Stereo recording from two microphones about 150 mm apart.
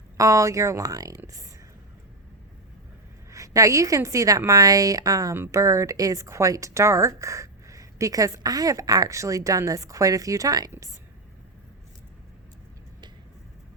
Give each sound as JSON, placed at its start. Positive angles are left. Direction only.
{"t": 0.2, "sound": "a woman's voice", "side_deg": -20}
{"t": 3.2, "sound": "a woman's voice", "side_deg": -20}